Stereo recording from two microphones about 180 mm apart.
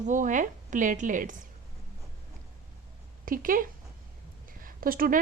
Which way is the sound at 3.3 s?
50° right (ahead or behind).